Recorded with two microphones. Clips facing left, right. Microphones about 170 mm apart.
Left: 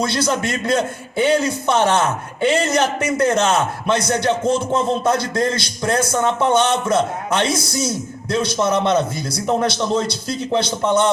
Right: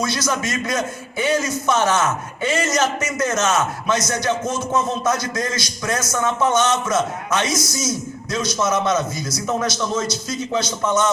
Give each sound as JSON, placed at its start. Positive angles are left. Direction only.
{"t": 0.0, "sound": "a man's voice", "side_deg": 25}
{"t": 7.7, "sound": "a man's voice", "side_deg": 60}
{"t": 8.3, "sound": "a man's voice", "side_deg": 30}